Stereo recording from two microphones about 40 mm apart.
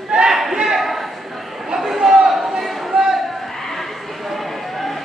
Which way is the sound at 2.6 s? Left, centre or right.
Centre.